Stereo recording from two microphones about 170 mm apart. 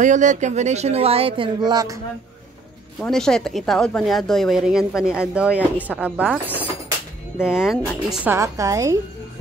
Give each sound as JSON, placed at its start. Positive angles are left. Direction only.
{"t": 0.0, "sound": "speech", "side_deg": -45}
{"t": 3.0, "sound": "speech", "side_deg": 5}
{"t": 6.4, "sound": "speech", "side_deg": 10}
{"t": 7.3, "sound": "a woman's voice", "side_deg": -5}